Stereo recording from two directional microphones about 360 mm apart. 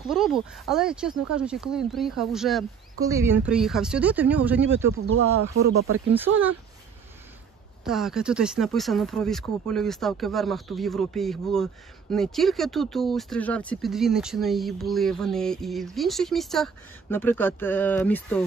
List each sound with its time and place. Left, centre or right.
0.1 s speech: centre
5.0 s speech: right
6.1 s speech: centre
7.8 s speech: centre